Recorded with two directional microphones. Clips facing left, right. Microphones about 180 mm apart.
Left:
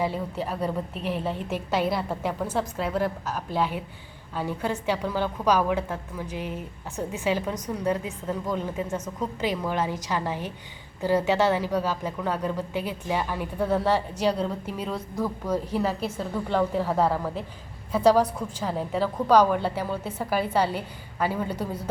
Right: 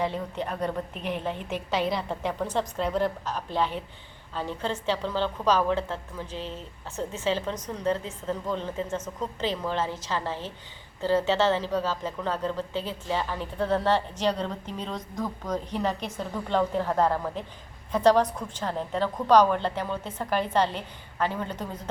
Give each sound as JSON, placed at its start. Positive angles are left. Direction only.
{"t": 0.0, "sound": "a woman's voice", "side_deg": 5}